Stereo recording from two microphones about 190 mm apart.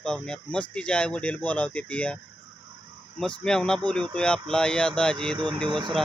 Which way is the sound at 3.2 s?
5° left (ahead or behind).